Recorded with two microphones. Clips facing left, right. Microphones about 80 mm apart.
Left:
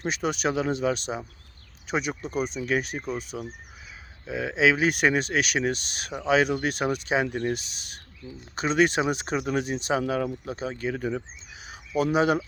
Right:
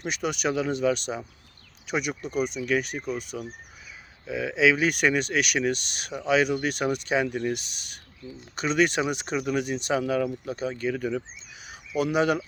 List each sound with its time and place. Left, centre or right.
0.0 s speech: left